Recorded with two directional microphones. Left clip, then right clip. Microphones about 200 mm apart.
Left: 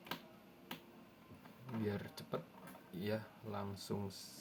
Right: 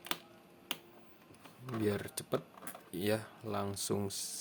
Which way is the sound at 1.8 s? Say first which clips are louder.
Right 8 dB; 60° right (ahead or behind).